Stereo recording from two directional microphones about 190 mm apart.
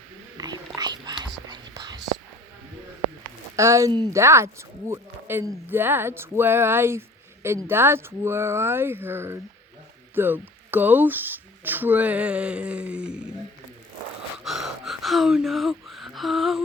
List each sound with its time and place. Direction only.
0.3 s whispering: 20° right (ahead or behind)
3.5 s speech: 15° right (ahead or behind)
14.4 s gasp: centre (ahead or behind)